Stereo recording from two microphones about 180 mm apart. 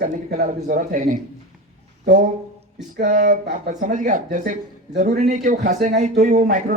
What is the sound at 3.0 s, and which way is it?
Speech, 45° right (ahead or behind).